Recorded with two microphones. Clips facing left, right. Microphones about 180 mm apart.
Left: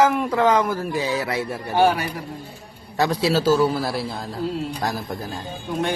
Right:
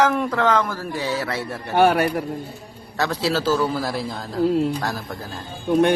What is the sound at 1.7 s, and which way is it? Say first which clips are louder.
Speech: right 2 dB; 60° right (ahead or behind).